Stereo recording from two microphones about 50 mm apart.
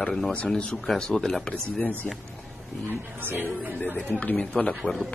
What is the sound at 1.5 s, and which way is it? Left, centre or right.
Speech, left.